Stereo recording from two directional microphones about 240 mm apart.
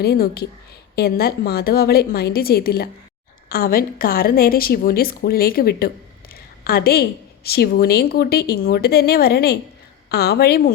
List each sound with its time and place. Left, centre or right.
0.0 s a woman's voice: left